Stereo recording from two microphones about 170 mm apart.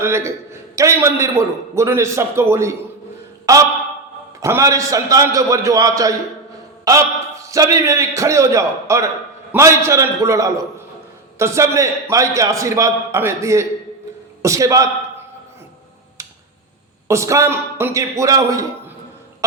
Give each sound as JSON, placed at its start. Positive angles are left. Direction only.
{"t": 0.0, "sound": "a man's voice", "side_deg": -15}
{"t": 4.4, "sound": "a man's voice", "side_deg": -15}
{"t": 16.2, "sound": "tick-tock", "side_deg": -15}
{"t": 17.1, "sound": "a man's voice", "side_deg": -15}